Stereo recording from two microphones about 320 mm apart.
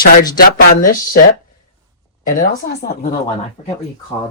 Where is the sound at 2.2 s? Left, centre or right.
Left.